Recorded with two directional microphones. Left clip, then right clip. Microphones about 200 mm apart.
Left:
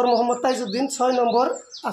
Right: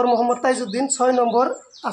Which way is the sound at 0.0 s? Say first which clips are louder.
Right 1 dB; 25° right (ahead or behind).